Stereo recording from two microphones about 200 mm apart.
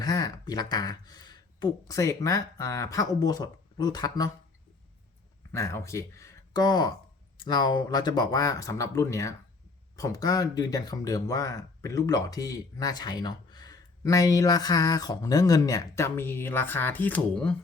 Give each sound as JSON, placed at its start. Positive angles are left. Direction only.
{"t": 0.0, "sound": "speech", "side_deg": 20}
{"t": 5.5, "sound": "speech", "side_deg": 10}